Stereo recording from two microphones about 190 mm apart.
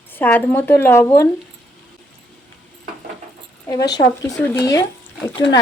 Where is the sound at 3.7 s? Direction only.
20° left (ahead or behind).